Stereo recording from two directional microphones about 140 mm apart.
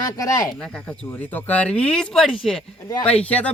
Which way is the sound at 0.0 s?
25° left (ahead or behind).